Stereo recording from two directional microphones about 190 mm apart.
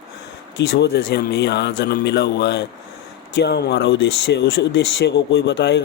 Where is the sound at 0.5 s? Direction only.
60° left (ahead or behind).